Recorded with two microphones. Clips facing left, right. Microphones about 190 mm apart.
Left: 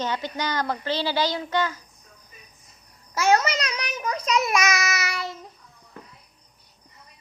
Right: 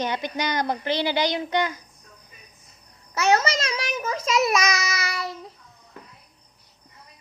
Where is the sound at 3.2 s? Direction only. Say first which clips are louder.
Even; 25° right (ahead or behind).